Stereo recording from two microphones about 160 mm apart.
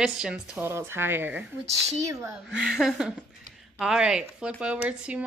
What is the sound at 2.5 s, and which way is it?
A woman's voice, centre (ahead or behind).